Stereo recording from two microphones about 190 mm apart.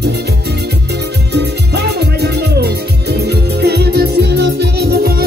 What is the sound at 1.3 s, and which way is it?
Music, 60° right (ahead or behind).